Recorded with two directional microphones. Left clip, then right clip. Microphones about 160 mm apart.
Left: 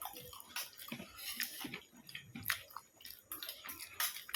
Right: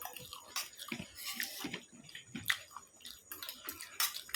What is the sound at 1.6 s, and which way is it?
Bathtub, 20° right (ahead or behind).